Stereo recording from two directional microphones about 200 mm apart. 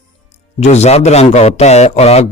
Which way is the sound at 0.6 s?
35° left (ahead or behind).